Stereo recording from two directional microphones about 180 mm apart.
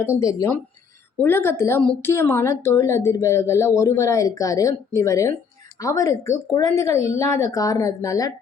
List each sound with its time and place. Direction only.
0.0 s a woman's voice: 15° left (ahead or behind)